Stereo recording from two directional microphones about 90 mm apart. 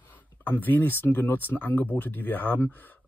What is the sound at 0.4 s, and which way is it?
Speech, 20° left (ahead or behind).